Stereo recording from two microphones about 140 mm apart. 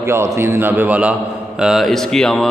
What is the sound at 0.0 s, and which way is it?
A man's voice, 20° right (ahead or behind).